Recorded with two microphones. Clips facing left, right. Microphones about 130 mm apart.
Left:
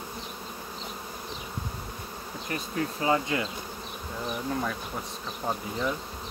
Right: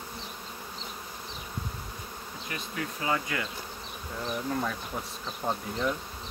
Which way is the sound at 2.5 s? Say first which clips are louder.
Left 5 dB; 35° left (ahead or behind).